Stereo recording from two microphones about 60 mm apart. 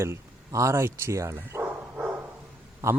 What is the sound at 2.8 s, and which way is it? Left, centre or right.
Speech, right.